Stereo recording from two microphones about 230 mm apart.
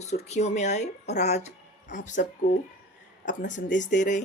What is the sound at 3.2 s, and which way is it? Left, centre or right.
Speech, left.